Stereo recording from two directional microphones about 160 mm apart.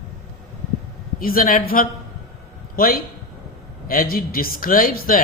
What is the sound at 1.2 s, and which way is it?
Speech, 60° left (ahead or behind).